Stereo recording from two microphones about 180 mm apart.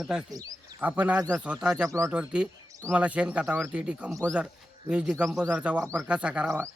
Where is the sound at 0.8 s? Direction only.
10° right (ahead or behind).